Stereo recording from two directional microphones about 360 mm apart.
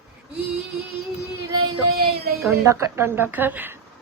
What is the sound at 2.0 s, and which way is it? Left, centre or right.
Speech, right.